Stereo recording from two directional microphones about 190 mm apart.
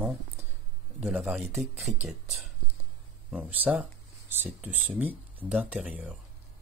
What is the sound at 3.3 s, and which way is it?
Speech, 10° right (ahead or behind).